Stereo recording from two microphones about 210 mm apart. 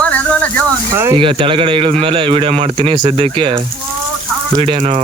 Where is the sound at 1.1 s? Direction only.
25° right (ahead or behind).